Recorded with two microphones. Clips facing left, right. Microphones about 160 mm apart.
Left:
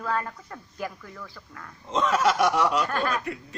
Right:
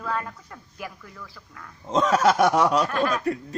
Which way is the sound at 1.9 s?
40° right (ahead or behind).